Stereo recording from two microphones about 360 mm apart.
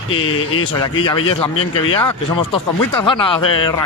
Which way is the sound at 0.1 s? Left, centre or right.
Left.